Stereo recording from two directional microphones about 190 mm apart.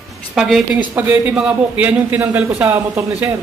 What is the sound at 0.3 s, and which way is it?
Speech, centre (ahead or behind).